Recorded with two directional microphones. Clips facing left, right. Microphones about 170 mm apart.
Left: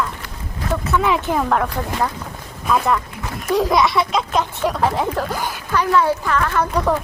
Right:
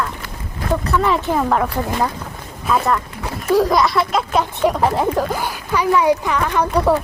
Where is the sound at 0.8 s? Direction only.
Centre (ahead or behind).